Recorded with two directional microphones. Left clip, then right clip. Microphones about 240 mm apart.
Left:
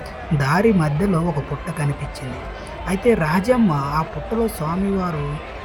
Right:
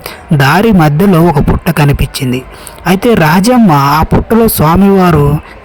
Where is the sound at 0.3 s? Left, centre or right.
Right.